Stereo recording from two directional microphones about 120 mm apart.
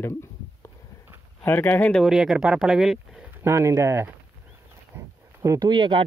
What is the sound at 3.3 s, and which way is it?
Speech, 20° right (ahead or behind).